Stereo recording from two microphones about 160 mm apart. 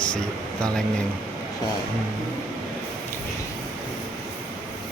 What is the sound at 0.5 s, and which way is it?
Speech, 5° left (ahead or behind).